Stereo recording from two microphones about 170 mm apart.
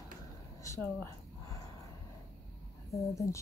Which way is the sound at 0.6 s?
15° left (ahead or behind).